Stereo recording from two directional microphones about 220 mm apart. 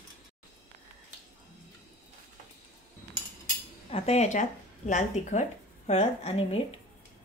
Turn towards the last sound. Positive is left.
turn(degrees=25)  # may be behind; listen again after turning